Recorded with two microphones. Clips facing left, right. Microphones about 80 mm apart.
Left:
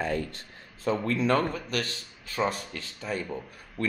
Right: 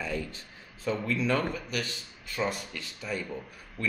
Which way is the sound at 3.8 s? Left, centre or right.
Left.